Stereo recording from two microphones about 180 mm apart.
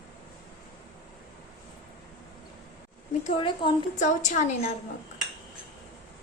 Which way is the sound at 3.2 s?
35° left (ahead or behind).